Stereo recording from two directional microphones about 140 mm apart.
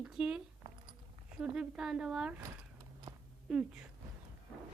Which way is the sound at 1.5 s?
5° right (ahead or behind).